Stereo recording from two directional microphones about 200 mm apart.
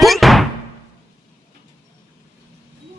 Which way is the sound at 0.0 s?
Centre (ahead or behind).